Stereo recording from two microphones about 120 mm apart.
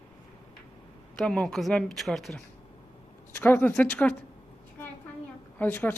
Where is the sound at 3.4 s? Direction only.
15° left (ahead or behind).